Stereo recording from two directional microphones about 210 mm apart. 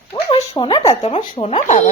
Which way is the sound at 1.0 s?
35° left (ahead or behind).